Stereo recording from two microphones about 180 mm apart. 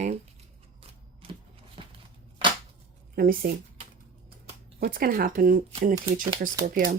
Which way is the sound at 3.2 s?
50° right (ahead or behind).